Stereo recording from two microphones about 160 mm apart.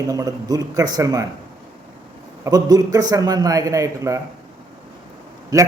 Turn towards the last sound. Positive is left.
turn(degrees=-25)  # may be behind; listen again after turning